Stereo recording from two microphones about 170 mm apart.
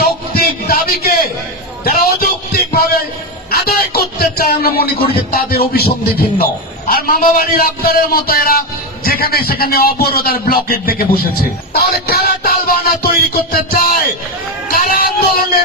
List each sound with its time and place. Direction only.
0.0 s music: 60° left (ahead or behind)
1.8 s a sound: 60° left (ahead or behind)
3.5 s speech: 65° left (ahead or behind)
6.4 s music: 60° left (ahead or behind)